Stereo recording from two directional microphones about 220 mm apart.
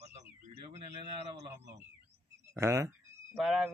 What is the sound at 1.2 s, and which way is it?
Speech, 25° right (ahead or behind).